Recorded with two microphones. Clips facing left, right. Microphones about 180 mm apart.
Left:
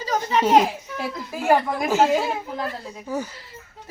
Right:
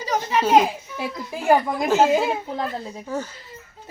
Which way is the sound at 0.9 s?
15° right (ahead or behind).